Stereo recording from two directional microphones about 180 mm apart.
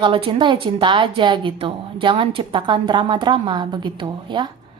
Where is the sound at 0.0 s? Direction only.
30° right (ahead or behind).